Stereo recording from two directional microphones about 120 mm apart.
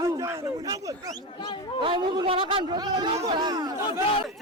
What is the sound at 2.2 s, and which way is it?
A man's voice, 45° right (ahead or behind).